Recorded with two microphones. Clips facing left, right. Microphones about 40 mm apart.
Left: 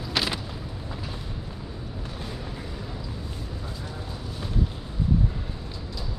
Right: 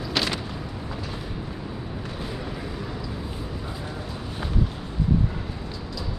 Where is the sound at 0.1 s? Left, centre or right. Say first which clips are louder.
Right 1 dB; centre.